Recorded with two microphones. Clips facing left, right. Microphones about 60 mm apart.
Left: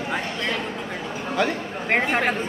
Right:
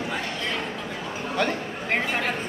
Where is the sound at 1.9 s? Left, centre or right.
Left.